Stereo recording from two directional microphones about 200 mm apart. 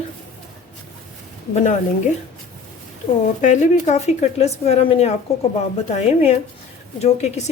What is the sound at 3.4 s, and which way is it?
Speech, 35° left (ahead or behind).